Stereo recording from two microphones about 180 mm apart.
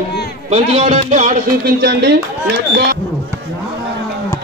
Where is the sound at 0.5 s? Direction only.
35° right (ahead or behind).